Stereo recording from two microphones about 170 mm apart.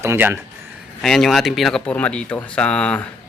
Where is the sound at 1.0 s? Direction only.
Centre (ahead or behind).